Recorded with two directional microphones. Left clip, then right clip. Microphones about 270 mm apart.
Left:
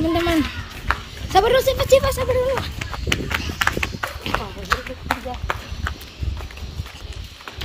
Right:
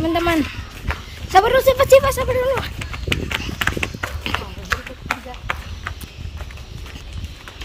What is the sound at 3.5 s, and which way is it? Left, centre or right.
Run, centre.